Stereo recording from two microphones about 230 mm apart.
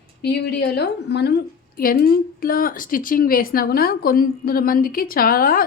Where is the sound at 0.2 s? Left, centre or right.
Left.